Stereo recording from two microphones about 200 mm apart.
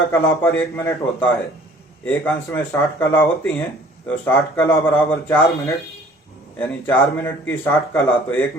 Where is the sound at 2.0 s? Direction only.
10° left (ahead or behind).